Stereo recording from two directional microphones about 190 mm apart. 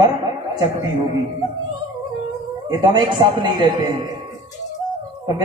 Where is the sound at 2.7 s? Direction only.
25° right (ahead or behind).